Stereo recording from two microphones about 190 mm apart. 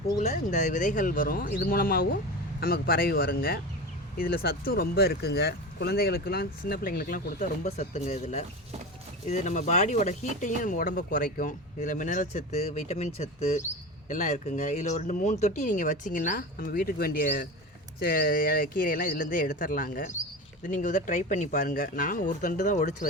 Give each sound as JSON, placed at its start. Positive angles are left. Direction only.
{"t": 0.2, "sound": "speech", "side_deg": 40}